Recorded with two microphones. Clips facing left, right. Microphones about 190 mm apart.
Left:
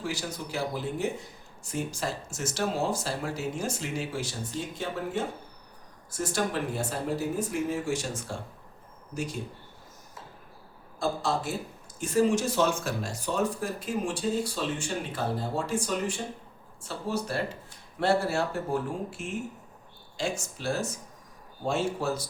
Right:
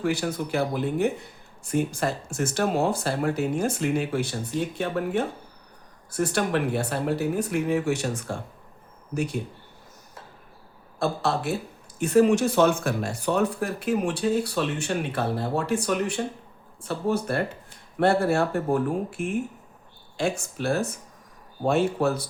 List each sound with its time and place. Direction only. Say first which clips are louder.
0.0 s speech: right 8 dB; 55° right (ahead or behind)
11.0 s speech: right 3 dB; 65° right (ahead or behind)